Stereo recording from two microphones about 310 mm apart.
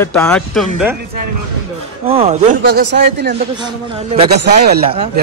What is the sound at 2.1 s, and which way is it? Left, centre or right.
A man's voice, right.